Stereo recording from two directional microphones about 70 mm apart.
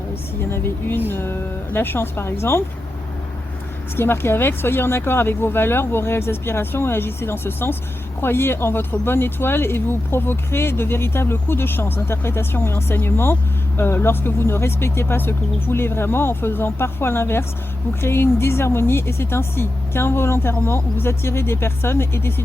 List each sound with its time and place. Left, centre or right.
0.5 s speech: left
3.9 s speech: left